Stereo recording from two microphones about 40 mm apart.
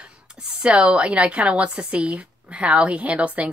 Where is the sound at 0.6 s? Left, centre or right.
Right.